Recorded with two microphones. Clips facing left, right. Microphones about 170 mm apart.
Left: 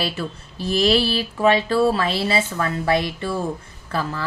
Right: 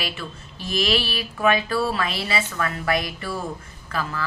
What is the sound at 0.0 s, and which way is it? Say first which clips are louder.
Speech: left 6 dB; 35° left (ahead or behind).